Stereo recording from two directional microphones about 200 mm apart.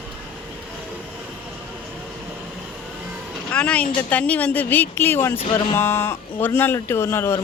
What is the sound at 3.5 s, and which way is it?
Speech, 5° left (ahead or behind).